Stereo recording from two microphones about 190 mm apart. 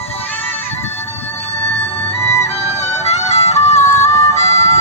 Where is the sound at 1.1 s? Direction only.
35° left (ahead or behind).